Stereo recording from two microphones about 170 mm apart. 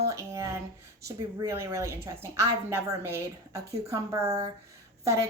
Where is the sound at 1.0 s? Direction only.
15° right (ahead or behind).